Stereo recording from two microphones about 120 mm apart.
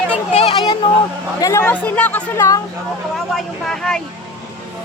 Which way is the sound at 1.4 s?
25° left (ahead or behind).